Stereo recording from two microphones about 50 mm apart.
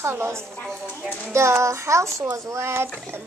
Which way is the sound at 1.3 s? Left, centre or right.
Right.